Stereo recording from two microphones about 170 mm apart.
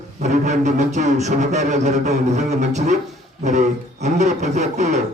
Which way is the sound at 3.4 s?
40° right (ahead or behind).